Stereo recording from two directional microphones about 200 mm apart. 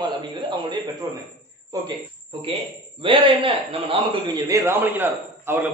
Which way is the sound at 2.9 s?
25° right (ahead or behind).